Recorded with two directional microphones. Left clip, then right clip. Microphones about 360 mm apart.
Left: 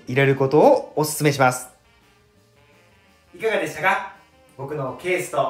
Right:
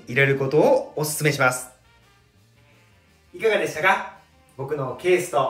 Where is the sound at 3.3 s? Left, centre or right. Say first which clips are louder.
Right 1 dB; centre.